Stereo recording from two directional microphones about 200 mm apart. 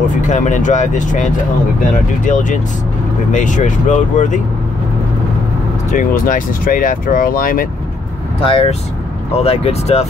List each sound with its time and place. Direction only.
0.3 s speech: 40° left (ahead or behind)
5.9 s speech: 40° left (ahead or behind)
8.5 s speech: 30° left (ahead or behind)